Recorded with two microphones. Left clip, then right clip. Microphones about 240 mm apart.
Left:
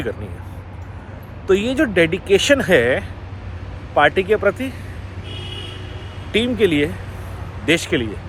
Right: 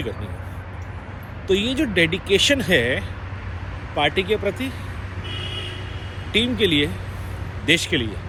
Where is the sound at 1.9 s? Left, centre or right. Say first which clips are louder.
Left 3 dB; left.